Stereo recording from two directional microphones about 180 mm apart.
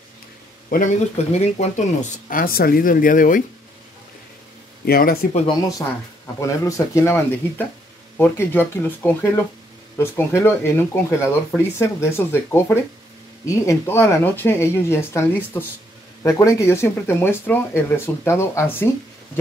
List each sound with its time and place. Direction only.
0.7 s speech: 45° left (ahead or behind)
4.8 s speech: 55° left (ahead or behind)
6.4 s speech: 15° left (ahead or behind)